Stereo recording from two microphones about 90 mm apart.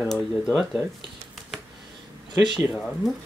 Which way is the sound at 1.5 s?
5° right (ahead or behind).